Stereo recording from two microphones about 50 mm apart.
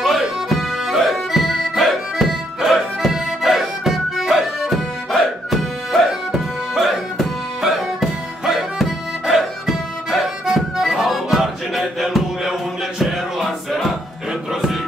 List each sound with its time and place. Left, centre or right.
0.0 s music: centre